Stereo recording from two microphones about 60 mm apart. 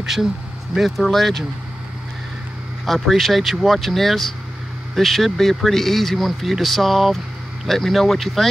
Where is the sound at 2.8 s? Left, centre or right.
Centre.